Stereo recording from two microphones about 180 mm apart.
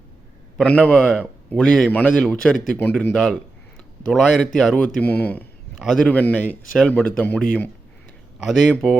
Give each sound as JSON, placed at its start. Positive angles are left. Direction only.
{"t": 0.5, "sound": "a man's voice", "side_deg": 5}
{"t": 8.4, "sound": "a man's voice", "side_deg": 0}